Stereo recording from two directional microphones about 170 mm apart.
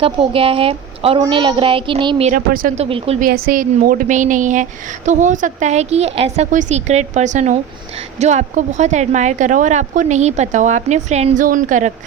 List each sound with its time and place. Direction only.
0.0 s speech: 35° right (ahead or behind)
1.2 s child singing: 30° right (ahead or behind)
2.3 s speech: 55° right (ahead or behind)
2.7 s speech: 35° right (ahead or behind)
3.2 s a woman's voice: 60° right (ahead or behind)